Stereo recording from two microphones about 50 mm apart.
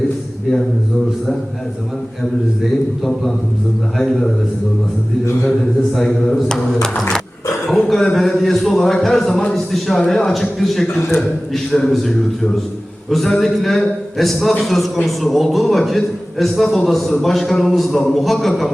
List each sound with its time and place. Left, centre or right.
3.9 s speech: centre
5.2 s a man's voice: left
5.5 s a man's voice: centre